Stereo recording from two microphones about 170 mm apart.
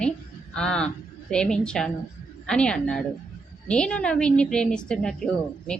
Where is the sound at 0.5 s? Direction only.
5° left (ahead or behind).